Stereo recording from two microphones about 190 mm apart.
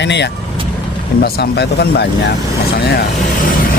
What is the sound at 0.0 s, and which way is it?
Speech, 65° left (ahead or behind).